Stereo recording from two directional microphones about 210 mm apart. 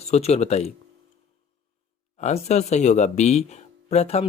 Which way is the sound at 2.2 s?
35° left (ahead or behind).